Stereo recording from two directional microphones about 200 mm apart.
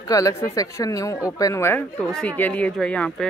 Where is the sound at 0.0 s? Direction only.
15° left (ahead or behind).